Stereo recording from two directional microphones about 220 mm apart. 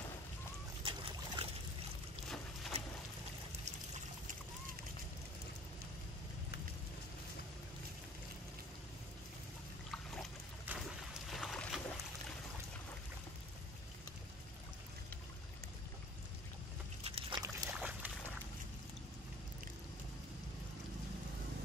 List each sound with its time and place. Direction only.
0.8 s boat: 25° right (ahead or behind)
9.8 s trickle: 5° right (ahead or behind)
11.2 s boat: centre (ahead or behind)
17.0 s a sound: 25° right (ahead or behind)
17.7 s boat: 5° right (ahead or behind)